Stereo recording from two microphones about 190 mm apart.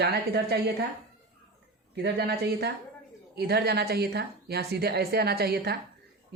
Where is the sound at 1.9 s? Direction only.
60° right (ahead or behind).